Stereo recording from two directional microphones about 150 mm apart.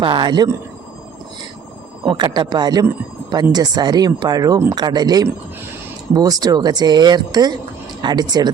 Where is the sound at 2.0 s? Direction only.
30° right (ahead or behind).